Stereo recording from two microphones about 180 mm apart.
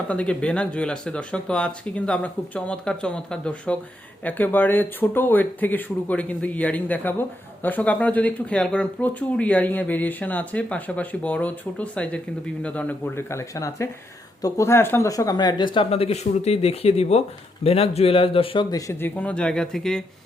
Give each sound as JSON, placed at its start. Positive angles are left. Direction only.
{"t": 0.1, "sound": "speech", "side_deg": 5}
{"t": 18.9, "sound": "speech", "side_deg": 10}